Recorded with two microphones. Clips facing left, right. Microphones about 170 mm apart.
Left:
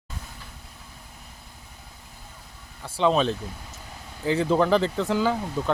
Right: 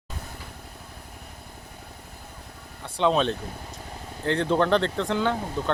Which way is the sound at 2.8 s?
Centre (ahead or behind).